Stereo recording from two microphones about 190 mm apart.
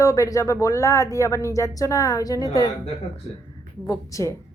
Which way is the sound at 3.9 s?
15° left (ahead or behind).